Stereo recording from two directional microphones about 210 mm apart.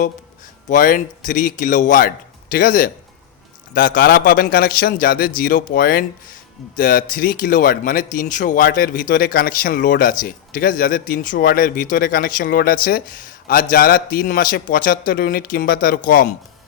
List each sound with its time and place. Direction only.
0.7 s a man's voice: 40° left (ahead or behind)